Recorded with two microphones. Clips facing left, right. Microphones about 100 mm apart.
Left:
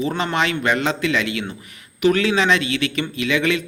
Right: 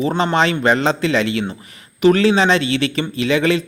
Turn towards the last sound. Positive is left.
turn(degrees=-35)  # may be behind; listen again after turning